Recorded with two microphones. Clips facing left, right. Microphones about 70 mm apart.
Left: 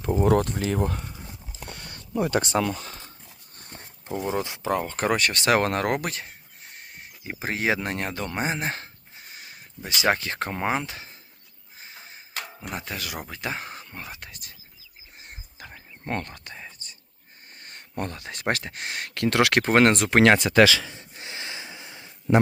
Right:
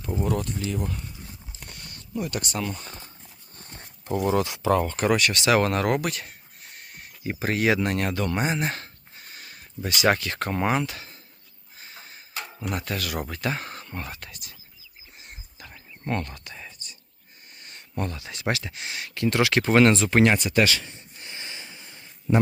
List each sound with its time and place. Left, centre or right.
0.0 s speech: left
0.3 s speech: left
1.9 s a sound: left
2.6 s speech: left
4.4 s speech: left
7.3 s speech: centre
11.8 s a sound: centre
12.7 s speech: centre
14.2 s speech: left
15.2 s whispering: left
16.8 s a sound: left
17.6 s speech: left
21.0 s a sound: left